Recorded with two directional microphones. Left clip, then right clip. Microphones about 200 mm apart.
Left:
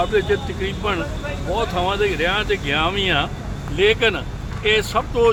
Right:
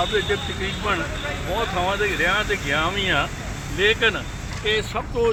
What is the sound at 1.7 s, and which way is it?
Speech, 30° left (ahead or behind).